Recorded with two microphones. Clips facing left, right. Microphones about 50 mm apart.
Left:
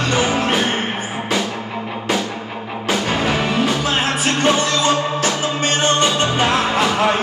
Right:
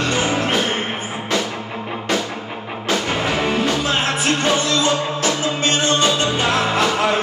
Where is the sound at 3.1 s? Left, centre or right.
Left.